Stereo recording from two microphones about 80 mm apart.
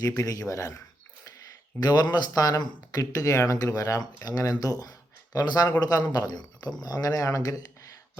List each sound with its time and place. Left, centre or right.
0.0 s speech: left
6.8 s speech: left